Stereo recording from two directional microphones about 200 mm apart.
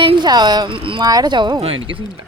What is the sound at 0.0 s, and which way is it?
Speech, 25° right (ahead or behind).